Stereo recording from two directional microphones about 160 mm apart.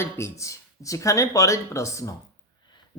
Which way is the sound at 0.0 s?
20° left (ahead or behind).